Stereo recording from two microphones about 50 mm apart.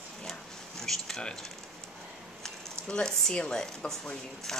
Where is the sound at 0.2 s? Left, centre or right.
Centre.